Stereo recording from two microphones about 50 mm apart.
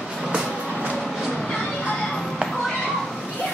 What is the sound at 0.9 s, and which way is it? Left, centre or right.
Train, centre.